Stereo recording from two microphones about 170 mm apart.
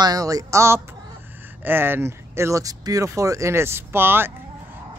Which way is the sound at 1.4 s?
10° right (ahead or behind).